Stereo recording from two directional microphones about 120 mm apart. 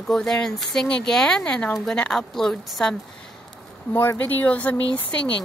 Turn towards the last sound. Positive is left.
turn(degrees=10)  # may be behind; listen again after turning